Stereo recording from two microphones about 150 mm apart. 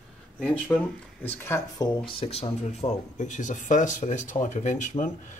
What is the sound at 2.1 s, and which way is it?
Speech, 40° left (ahead or behind).